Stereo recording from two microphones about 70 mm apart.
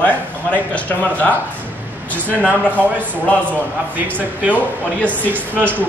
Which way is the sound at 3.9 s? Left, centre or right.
Right.